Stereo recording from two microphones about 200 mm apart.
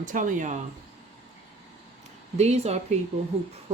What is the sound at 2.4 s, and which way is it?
Speech, 35° right (ahead or behind).